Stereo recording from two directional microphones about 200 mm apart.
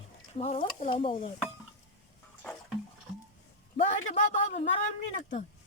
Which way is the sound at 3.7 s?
35° left (ahead or behind).